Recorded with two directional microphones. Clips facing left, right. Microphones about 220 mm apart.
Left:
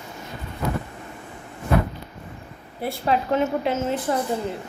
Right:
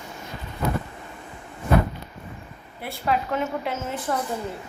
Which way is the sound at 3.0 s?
25° left (ahead or behind).